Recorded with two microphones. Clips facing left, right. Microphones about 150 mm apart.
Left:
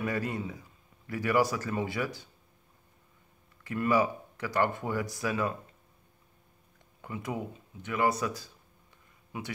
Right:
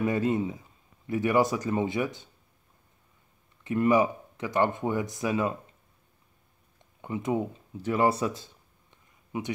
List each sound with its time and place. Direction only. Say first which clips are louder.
0.0 s speech: right 6 dB; 20° right (ahead or behind)
3.6 s speech: right 4 dB; 20° right (ahead or behind)
7.0 s speech: right 7 dB; 20° right (ahead or behind)